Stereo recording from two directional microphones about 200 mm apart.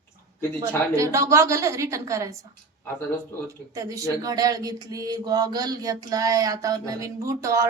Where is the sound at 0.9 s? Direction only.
15° right (ahead or behind).